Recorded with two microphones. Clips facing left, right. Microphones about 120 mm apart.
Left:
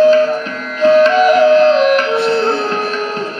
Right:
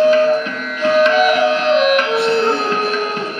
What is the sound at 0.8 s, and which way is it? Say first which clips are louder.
Music: left 4 dB; 30° left (ahead or behind).